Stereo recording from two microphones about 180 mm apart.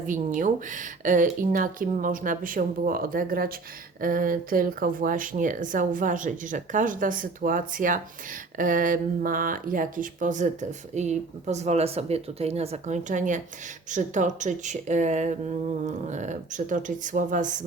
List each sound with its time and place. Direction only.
0.3 s speech: 45° right (ahead or behind)